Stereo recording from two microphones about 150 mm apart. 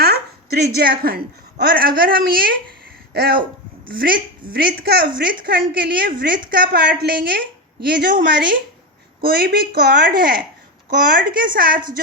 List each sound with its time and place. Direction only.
0.0 s a sound: 90° right
1.6 s a woman's voice: 75° right (ahead or behind)
3.1 s speech: 90° right
3.8 s a woman's voice: 75° right (ahead or behind)
4.5 s a woman's voice: 85° right
9.2 s a woman's voice: 90° right